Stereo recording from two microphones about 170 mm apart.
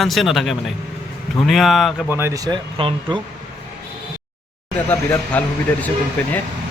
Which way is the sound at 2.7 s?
30° right (ahead or behind).